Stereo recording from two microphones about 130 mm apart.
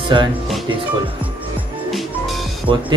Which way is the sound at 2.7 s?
40° right (ahead or behind).